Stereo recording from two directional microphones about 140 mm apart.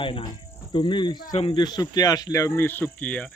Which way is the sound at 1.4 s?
35° left (ahead or behind).